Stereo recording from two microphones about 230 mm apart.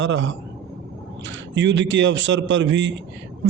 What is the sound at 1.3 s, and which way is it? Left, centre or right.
A man's voice, right.